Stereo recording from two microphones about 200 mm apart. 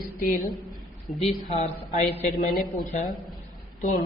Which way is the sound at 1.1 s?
30° left (ahead or behind).